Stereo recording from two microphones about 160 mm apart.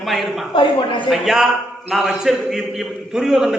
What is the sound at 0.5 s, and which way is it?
Speech, 30° left (ahead or behind).